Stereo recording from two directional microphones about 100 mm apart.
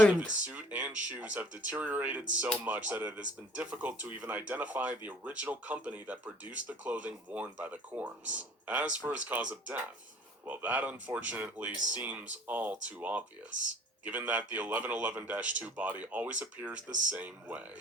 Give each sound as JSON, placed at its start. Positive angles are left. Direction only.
{"t": 0.4, "sound": "speech", "side_deg": -15}